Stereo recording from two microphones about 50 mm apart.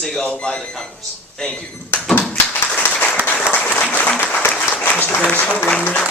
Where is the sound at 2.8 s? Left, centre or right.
Left.